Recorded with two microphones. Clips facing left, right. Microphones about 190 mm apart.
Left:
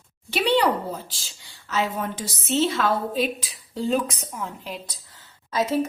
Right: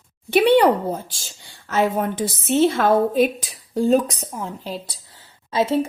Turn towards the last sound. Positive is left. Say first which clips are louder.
# right 3 dB
turn(degrees=-30)  # may be behind; listen again after turning